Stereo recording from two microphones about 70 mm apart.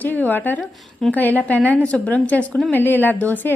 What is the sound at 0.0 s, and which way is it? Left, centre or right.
A woman's voice, left.